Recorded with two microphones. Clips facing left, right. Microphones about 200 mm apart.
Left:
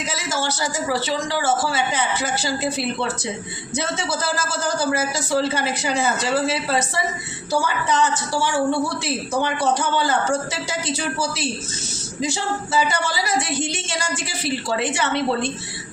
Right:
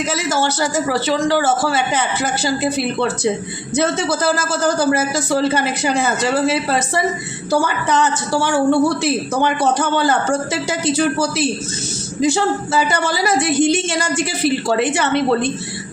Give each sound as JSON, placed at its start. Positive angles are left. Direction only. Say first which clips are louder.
{"t": 0.0, "sound": "a woman's voice", "louder": "right 7 dB", "side_deg": -65}